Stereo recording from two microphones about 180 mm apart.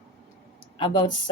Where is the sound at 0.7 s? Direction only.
25° left (ahead or behind).